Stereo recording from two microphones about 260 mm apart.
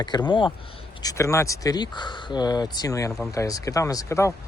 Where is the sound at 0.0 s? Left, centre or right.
Centre.